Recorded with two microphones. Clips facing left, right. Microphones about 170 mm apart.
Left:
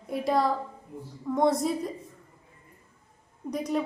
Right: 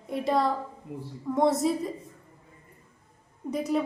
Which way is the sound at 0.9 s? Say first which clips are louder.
Right 7 dB; 75° right (ahead or behind).